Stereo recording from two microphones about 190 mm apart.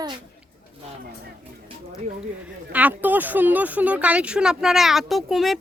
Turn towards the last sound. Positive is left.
turn(degrees=0)  # may be behind; listen again after turning